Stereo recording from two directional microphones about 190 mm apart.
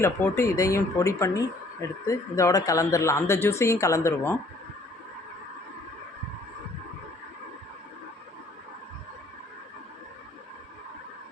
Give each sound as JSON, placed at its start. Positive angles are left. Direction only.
{"t": 0.0, "sound": "speech", "side_deg": 15}